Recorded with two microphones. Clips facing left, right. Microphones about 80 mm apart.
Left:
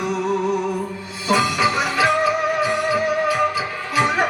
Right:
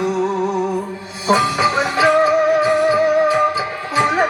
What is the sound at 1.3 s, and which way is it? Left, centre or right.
Music, right.